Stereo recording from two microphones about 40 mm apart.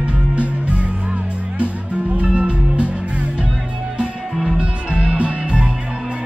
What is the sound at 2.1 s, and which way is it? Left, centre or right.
Music, right.